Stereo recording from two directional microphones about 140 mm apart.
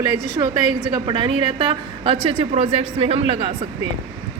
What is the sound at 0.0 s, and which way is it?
Speech, 30° right (ahead or behind).